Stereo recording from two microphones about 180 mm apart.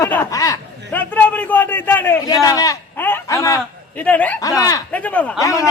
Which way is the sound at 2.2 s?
20° left (ahead or behind).